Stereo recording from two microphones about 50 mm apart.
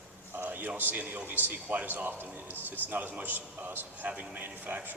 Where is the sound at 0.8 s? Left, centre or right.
Right.